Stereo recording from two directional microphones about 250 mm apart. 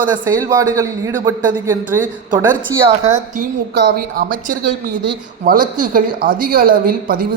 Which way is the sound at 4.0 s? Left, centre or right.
Right.